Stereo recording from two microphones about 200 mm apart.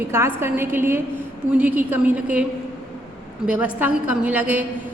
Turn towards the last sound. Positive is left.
turn(degrees=-10)  # may be behind; listen again after turning